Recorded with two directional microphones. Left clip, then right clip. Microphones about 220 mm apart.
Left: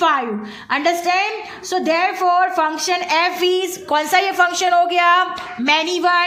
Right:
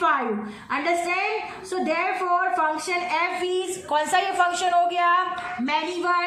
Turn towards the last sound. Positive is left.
turn(degrees=45)  # may be behind; listen again after turning